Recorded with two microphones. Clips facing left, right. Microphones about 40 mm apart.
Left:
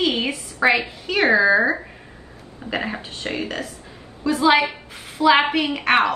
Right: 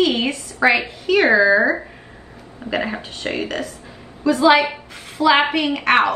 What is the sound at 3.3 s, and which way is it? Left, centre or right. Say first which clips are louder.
Speech: right 3 dB; centre.